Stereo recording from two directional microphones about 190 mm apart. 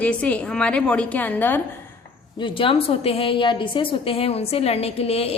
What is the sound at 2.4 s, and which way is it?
A woman's voice, 25° left (ahead or behind).